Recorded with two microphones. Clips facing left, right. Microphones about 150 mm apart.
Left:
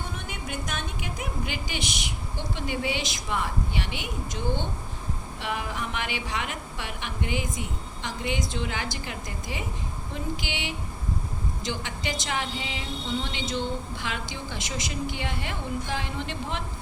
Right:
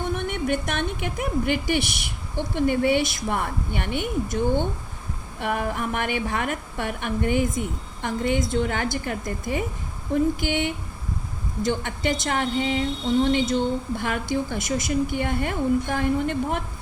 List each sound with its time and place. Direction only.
0.1 s a woman's voice: 60° right (ahead or behind)